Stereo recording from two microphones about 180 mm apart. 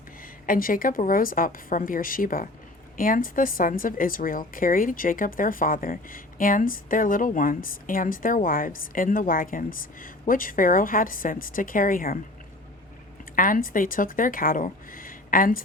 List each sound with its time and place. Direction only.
0.4 s speech: 50° left (ahead or behind)
13.3 s speech: 50° left (ahead or behind)